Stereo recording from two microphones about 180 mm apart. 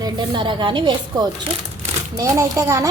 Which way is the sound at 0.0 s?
25° right (ahead or behind).